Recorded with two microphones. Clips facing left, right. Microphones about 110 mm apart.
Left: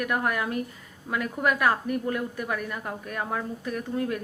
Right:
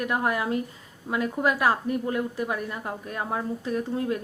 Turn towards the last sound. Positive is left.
turn(degrees=-25)  # may be behind; listen again after turning